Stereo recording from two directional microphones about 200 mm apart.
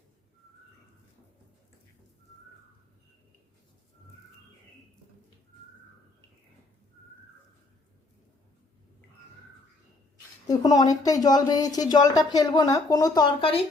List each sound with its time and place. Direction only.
10.4 s speech: 20° left (ahead or behind)